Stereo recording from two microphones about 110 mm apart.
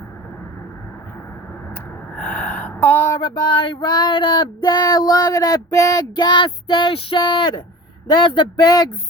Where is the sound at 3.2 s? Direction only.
45° left (ahead or behind).